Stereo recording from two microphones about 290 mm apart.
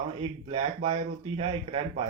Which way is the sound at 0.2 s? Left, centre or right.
Right.